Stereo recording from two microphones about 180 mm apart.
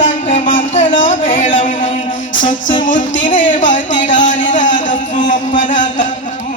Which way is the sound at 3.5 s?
45° left (ahead or behind).